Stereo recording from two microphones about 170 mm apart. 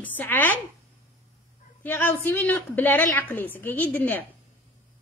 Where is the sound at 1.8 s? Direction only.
15° left (ahead or behind).